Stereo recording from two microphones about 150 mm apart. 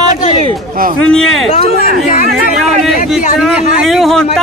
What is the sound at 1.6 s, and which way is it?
Speech, 85° right.